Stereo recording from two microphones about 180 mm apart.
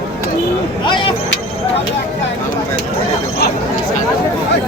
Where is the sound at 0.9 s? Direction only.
25° left (ahead or behind).